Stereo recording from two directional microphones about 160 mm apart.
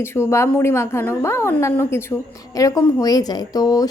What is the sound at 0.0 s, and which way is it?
A woman's voice, 15° left (ahead or behind).